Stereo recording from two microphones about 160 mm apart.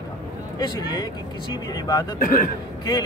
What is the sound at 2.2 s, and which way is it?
Speech, 60° left (ahead or behind).